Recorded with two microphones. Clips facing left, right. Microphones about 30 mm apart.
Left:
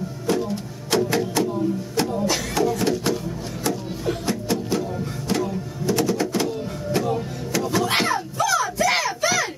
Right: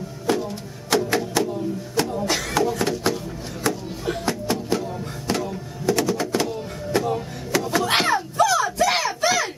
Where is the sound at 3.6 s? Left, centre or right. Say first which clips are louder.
Even; centre.